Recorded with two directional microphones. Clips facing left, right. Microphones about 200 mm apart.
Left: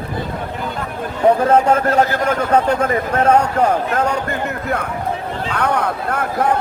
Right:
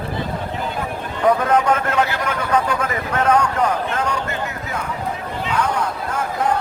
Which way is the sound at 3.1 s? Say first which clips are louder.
Left 2 dB; 30° left (ahead or behind).